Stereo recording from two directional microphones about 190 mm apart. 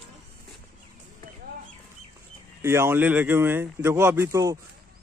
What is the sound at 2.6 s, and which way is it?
A man's voice, 15° right (ahead or behind).